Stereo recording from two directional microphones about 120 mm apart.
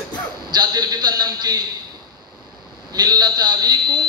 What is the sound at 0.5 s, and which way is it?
A man's voice, 35° right (ahead or behind).